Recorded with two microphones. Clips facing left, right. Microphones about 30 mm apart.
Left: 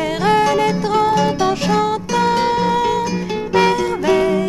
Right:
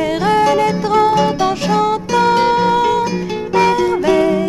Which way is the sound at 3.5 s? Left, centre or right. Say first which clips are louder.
Right 2 dB; centre.